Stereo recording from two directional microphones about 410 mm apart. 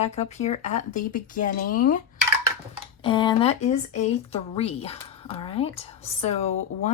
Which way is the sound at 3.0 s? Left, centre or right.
Centre.